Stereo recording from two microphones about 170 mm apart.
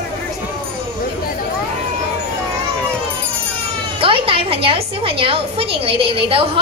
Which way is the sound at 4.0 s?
30° right (ahead or behind).